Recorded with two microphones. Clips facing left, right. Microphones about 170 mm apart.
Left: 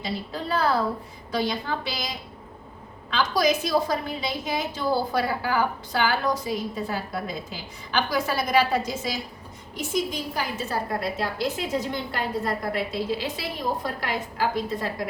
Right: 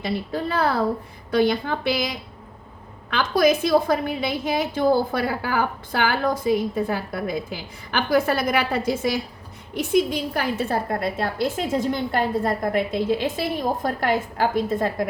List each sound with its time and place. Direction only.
0.0 s a woman's voice: 55° right (ahead or behind)